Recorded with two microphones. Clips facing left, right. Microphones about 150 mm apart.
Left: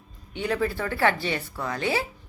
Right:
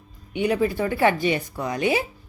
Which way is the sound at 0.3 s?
15° right (ahead or behind).